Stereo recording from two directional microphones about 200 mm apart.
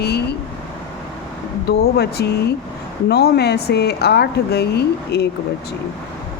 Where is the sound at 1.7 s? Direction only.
55° left (ahead or behind).